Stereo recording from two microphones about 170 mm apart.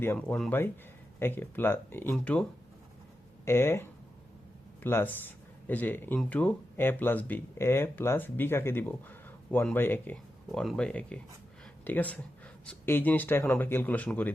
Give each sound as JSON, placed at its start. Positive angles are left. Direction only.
{"t": 0.0, "sound": "speech", "side_deg": 10}